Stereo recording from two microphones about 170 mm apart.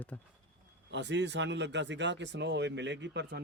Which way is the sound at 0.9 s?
90° right.